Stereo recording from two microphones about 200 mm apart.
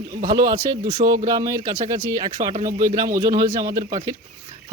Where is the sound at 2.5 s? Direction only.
40° right (ahead or behind).